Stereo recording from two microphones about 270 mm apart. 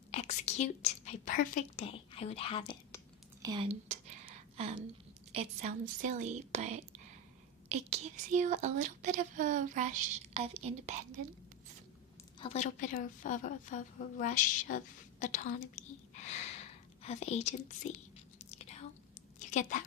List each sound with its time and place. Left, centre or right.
0.1 s a woman's voice: left
3.4 s a sound: centre
5.3 s speech: right
12.4 s a woman's voice: left
16.3 s whispering: left
19.4 s a sound: left